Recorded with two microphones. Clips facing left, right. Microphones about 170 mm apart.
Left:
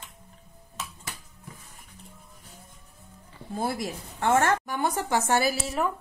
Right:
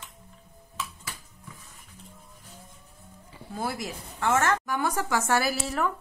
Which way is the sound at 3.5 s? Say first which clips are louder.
Left 3 dB; 30° left (ahead or behind).